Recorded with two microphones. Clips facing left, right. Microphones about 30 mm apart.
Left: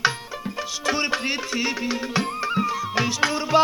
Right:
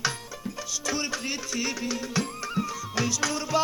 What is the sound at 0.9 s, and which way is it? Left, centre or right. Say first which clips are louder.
Music: left 7 dB; left.